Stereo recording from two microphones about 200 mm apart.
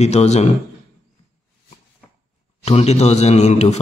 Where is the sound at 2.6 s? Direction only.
30° left (ahead or behind).